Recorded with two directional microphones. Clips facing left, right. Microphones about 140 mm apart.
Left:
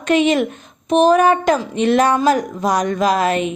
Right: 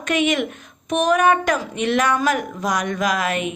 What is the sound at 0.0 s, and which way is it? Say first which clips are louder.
A woman's voice: left 5 dB; 30° left (ahead or behind).